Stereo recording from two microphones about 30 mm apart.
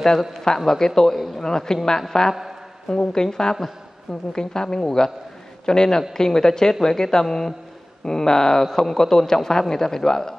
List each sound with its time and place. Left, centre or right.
0.7 s a woman's voice: centre
7.2 s speech: centre
8.0 s speech: centre